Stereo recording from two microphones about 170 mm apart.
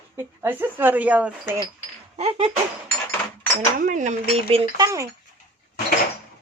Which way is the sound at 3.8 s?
50° right (ahead or behind).